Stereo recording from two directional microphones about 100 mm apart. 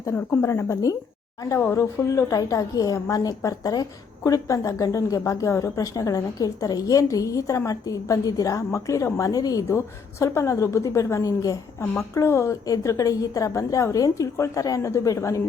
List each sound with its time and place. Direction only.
0.1 s speech: 20° left (ahead or behind)
0.4 s a woman's voice: 30° left (ahead or behind)